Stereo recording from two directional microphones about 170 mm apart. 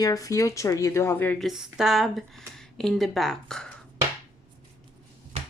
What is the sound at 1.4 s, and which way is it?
Speech, centre (ahead or behind).